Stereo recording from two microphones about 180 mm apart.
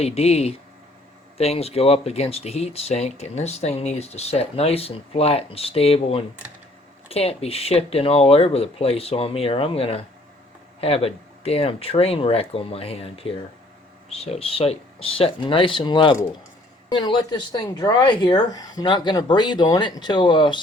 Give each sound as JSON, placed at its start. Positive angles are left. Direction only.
{"t": 0.0, "sound": "speech", "side_deg": 35}